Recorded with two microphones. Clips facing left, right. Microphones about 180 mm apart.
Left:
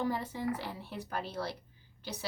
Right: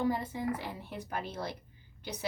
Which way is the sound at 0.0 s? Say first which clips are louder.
Right 2 dB; 15° right (ahead or behind).